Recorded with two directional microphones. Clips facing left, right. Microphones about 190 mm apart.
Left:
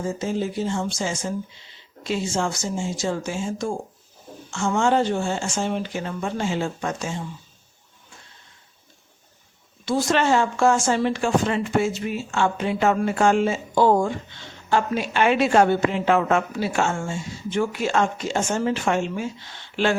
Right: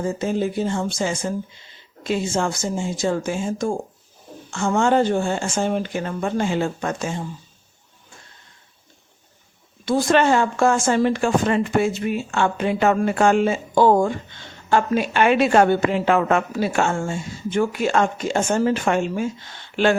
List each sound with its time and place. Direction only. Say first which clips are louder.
0.0 s speech: right 3 dB; 60° right (ahead or behind)
9.8 s speech: right 4 dB; 55° right (ahead or behind)